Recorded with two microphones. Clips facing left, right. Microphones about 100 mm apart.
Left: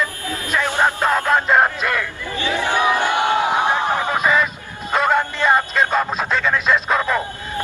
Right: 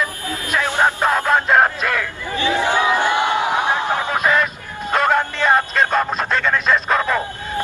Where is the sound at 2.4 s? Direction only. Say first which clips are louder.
Right 2 dB; 20° right (ahead or behind).